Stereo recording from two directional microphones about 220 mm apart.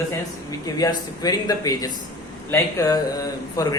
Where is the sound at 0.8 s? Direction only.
15° left (ahead or behind).